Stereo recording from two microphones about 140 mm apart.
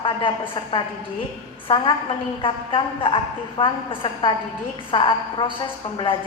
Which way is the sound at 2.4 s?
40° left (ahead or behind).